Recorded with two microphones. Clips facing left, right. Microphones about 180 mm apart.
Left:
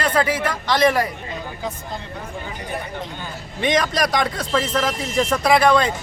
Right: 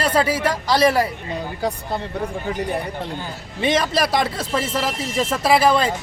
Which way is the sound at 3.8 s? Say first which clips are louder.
Even; 30° right (ahead or behind).